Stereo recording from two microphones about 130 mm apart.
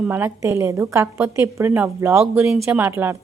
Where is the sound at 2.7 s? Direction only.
15° right (ahead or behind).